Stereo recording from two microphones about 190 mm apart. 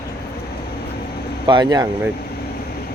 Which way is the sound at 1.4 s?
25° right (ahead or behind).